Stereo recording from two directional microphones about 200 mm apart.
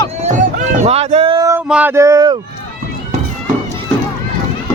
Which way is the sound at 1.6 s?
5° right (ahead or behind).